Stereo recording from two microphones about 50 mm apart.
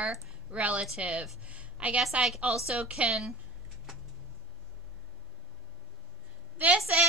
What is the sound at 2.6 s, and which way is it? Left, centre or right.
Speech, right.